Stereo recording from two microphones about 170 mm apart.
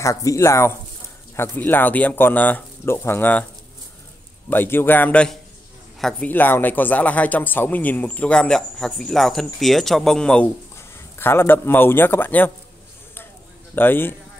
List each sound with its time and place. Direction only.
0.0 s speech: 20° left (ahead or behind)
4.5 s a man's voice: 10° left (ahead or behind)
13.7 s speech: 10° left (ahead or behind)